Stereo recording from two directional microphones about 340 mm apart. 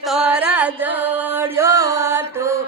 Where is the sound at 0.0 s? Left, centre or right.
Centre.